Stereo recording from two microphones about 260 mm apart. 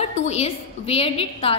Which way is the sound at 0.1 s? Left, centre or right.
Left.